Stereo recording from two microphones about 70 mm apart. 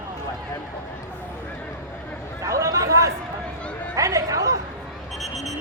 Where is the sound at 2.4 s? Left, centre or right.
Right.